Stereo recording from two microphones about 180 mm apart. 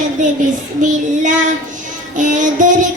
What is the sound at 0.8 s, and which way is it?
Child singing, 45° right (ahead or behind).